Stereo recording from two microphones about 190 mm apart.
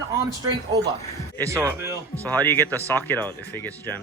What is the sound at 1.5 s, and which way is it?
Speech, 15° right (ahead or behind).